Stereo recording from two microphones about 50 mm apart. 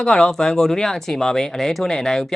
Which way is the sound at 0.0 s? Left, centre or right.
Centre.